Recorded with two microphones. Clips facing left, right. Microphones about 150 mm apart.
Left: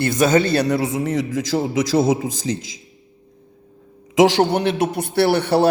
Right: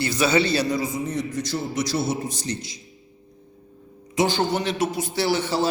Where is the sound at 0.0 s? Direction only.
50° left (ahead or behind); by 1.7 s 90° left.